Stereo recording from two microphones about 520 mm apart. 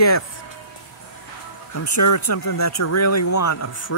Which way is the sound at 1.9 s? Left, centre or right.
Left.